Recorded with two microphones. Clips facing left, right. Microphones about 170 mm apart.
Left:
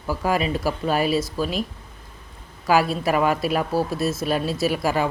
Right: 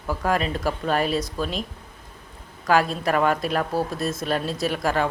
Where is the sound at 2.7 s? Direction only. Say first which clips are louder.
Left 1 dB; 5° left (ahead or behind).